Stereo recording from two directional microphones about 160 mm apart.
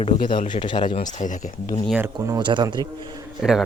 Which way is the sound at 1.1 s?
55° left (ahead or behind).